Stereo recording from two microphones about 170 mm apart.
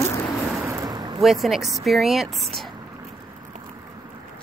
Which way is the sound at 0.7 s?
20° right (ahead or behind).